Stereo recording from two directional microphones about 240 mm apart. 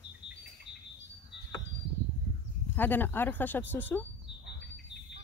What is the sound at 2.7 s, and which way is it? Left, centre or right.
Speech, centre.